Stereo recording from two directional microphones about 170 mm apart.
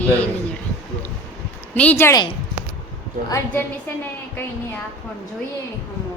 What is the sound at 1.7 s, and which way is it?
Speech, 10° left (ahead or behind).